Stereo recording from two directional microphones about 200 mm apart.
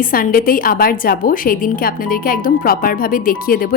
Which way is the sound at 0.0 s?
45° left (ahead or behind).